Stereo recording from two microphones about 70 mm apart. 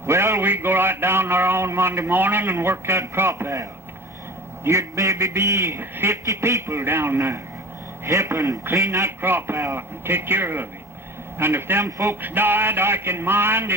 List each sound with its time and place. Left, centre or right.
0.0 s a man's voice: right
5.7 s a man's voice: right
6.2 s a man's voice: right
9.2 s a man's voice: right
11.9 s a man's voice: right
12.2 s a man's voice: right